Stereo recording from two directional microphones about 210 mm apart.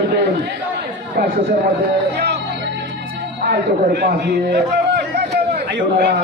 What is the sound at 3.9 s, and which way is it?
A man's voice, 50° right (ahead or behind).